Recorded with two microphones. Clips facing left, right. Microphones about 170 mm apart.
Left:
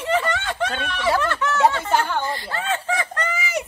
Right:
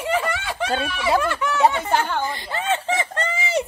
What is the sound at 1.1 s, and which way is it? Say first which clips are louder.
A woman's voice: even; 10° right (ahead or behind).